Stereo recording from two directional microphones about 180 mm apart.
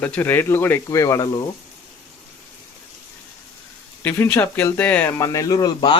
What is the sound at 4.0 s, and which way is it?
Speech, 10° left (ahead or behind).